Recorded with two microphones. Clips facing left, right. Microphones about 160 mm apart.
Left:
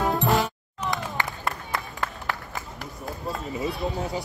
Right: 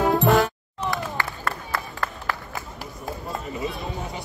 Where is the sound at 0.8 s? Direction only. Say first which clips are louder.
Right 1 dB; 20° left (ahead or behind).